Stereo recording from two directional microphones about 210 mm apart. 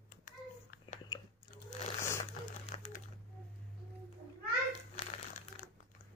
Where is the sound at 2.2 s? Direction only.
35° left (ahead or behind).